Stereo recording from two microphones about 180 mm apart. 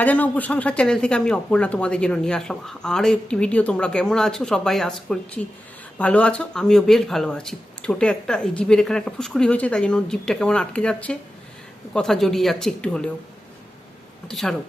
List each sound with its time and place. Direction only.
0.0 s speech: 10° left (ahead or behind)
14.3 s speech: centre (ahead or behind)